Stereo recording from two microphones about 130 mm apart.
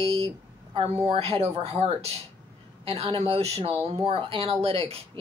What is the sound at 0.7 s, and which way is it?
Speech, 50° right (ahead or behind).